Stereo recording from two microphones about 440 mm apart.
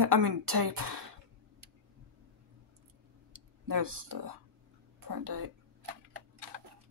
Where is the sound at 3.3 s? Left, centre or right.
Right.